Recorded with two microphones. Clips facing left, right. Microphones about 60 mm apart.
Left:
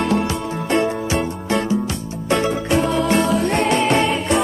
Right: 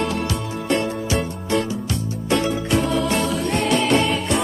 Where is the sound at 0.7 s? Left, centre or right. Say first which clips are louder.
Left 3 dB; left.